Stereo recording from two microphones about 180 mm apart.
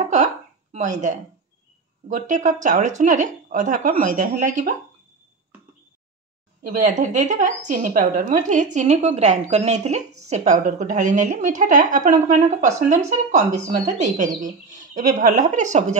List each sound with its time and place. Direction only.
0.0 s a sound: 40° right (ahead or behind)
2.0 s a woman's voice: 45° right (ahead or behind)
6.6 s a woman's voice: 45° right (ahead or behind)